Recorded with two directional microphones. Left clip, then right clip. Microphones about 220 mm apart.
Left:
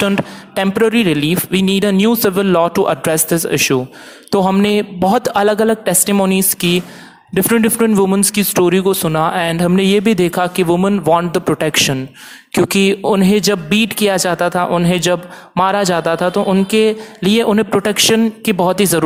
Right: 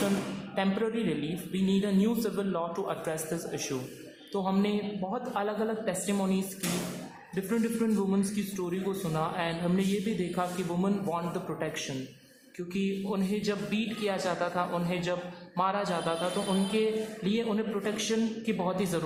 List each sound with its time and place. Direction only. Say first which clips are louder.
0.5 s a man's voice: left 17 dB; 45° left (ahead or behind)